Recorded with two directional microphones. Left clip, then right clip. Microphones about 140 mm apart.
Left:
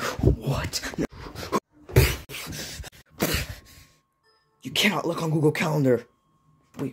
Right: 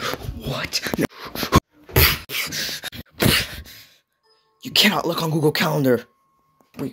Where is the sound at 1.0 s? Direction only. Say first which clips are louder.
Right 7 dB; centre (ahead or behind).